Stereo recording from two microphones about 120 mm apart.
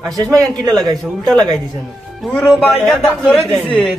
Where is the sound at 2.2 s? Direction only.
5° left (ahead or behind).